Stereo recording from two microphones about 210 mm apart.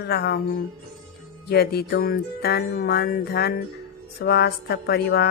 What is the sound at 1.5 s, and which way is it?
A woman's voice, 50° left (ahead or behind).